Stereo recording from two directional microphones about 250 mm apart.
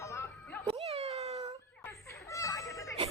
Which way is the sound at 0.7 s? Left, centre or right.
Right.